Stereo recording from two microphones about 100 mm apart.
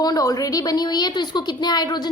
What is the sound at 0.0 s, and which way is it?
A woman's voice, 40° left (ahead or behind).